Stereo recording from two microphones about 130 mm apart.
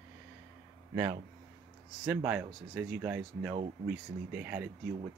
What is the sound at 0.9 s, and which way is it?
Speech, 20° right (ahead or behind).